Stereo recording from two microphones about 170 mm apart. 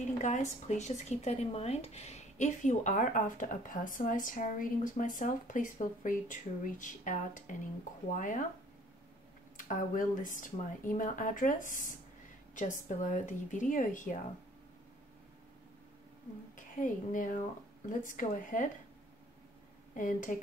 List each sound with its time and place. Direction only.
0.0 s speech: 45° left (ahead or behind)
9.6 s speech: 50° left (ahead or behind)
16.5 s speech: 50° left (ahead or behind)
19.9 s speech: 50° left (ahead or behind)